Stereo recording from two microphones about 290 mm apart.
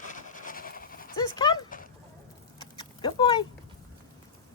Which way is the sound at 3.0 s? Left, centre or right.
Centre.